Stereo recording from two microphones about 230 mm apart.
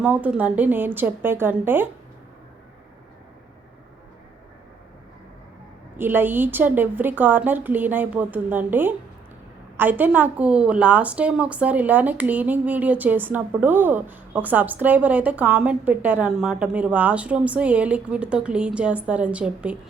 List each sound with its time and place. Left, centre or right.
0.0 s a woman's voice: centre
6.0 s a woman's voice: centre